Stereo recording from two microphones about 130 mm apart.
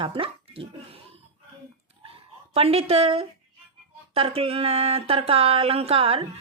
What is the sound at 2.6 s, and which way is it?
Speech, 50° right (ahead or behind).